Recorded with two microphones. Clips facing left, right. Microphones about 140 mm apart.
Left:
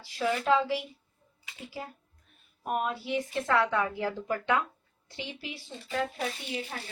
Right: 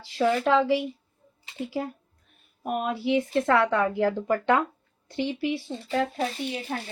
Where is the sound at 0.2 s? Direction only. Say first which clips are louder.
Right 4 dB; 60° right (ahead or behind).